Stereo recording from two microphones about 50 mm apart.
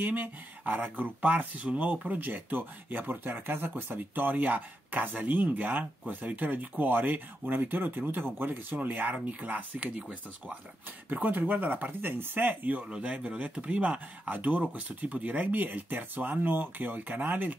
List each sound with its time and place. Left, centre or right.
0.0 s speech: right
12.7 s speech: right